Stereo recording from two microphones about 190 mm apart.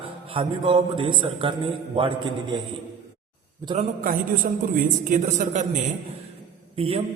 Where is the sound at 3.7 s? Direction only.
45° right (ahead or behind).